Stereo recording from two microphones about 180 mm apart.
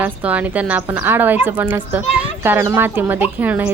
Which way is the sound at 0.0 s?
10° right (ahead or behind).